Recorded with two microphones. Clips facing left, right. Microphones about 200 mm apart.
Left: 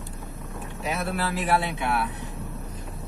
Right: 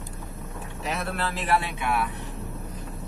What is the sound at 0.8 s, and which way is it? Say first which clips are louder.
Speech: left 2 dB; 5° left (ahead or behind).